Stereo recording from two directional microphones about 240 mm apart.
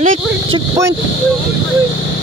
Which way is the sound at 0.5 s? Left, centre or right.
Centre.